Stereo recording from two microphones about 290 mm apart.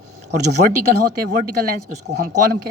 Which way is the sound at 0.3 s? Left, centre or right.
Right.